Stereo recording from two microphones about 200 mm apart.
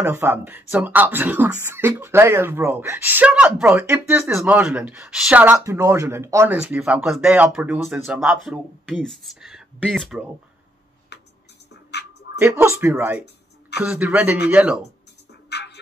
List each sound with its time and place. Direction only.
0.0 s speech: 10° right (ahead or behind)
11.1 s music: 55° left (ahead or behind)
12.4 s speech: 15° right (ahead or behind)
15.5 s music: 55° left (ahead or behind)